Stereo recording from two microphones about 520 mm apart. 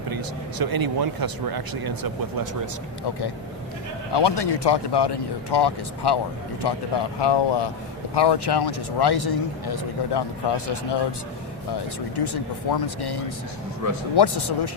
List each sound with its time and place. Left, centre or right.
0.6 s speech: right
4.1 s speech: left
12.1 s speech: left